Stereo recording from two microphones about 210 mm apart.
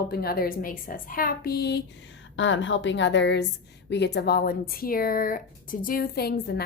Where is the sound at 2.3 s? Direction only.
65° left (ahead or behind).